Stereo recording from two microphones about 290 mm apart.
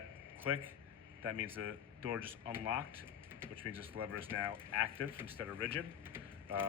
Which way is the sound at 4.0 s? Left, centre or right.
Centre.